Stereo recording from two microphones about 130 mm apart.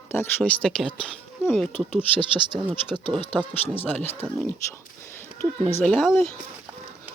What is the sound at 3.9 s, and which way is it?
Speech, 15° left (ahead or behind).